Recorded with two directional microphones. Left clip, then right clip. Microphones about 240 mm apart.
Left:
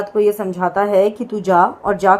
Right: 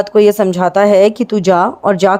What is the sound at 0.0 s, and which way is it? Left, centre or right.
A woman's voice, right.